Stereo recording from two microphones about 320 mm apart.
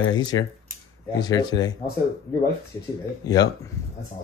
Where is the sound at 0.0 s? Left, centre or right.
Centre.